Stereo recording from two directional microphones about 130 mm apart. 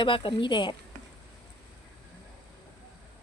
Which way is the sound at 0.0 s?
40° left (ahead or behind).